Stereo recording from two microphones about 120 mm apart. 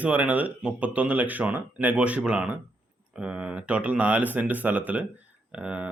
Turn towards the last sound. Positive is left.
turn(degrees=-10)  # may be behind; listen again after turning